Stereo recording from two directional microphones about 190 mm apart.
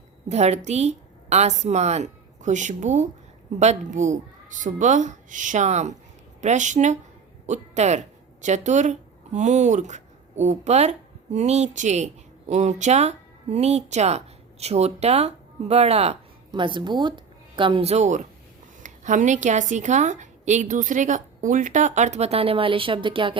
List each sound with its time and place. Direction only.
0.3 s a woman's voice: 35° right (ahead or behind)